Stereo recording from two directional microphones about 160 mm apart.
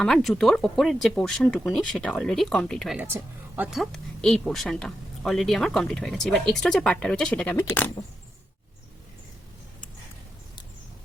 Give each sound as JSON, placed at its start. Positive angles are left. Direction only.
{"t": 0.0, "sound": "speech", "side_deg": 0}
{"t": 3.0, "sound": "speech", "side_deg": -15}
{"t": 3.7, "sound": "speech", "side_deg": 0}